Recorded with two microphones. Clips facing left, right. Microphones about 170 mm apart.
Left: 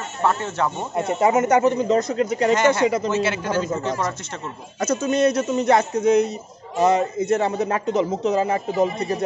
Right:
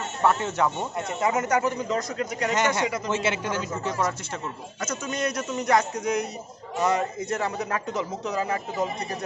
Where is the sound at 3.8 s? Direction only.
10° right (ahead or behind).